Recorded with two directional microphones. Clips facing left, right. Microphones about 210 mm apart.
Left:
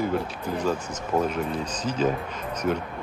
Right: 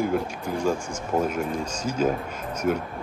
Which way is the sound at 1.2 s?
10° right (ahead or behind).